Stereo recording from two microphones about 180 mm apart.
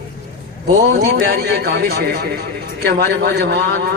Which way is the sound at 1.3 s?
65° right (ahead or behind).